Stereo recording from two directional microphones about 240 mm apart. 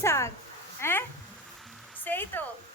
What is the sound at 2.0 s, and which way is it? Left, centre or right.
Speech, centre.